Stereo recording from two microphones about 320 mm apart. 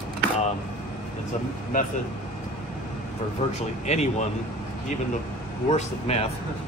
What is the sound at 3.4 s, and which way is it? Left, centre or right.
Speech, centre.